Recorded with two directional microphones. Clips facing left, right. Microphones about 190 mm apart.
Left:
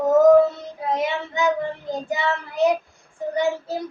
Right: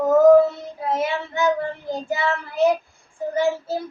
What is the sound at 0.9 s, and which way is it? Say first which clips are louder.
Child singing: even; 15° left (ahead or behind).